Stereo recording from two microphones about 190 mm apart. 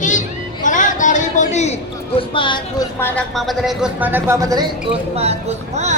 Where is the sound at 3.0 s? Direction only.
10° left (ahead or behind).